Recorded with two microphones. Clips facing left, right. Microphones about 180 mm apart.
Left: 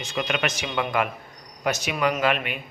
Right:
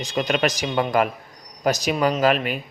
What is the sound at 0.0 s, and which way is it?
Speech, 35° right (ahead or behind).